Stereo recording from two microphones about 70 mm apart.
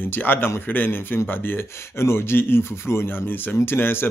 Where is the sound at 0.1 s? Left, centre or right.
Left.